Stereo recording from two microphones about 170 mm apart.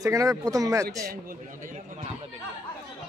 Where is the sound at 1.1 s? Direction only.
55° right (ahead or behind).